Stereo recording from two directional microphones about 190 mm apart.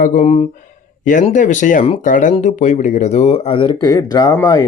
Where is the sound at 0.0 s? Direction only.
40° left (ahead or behind).